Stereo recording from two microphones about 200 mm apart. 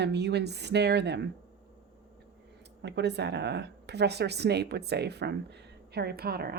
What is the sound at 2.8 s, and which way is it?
Speech, 60° right (ahead or behind).